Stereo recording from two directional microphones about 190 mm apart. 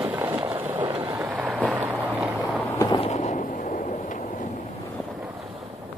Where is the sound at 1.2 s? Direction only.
10° right (ahead or behind).